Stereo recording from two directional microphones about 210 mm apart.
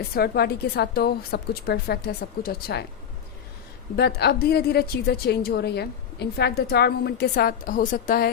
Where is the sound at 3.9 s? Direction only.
50° left (ahead or behind).